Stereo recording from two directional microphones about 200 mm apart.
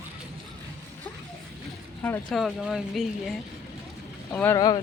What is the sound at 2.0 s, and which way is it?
Speech, 10° left (ahead or behind).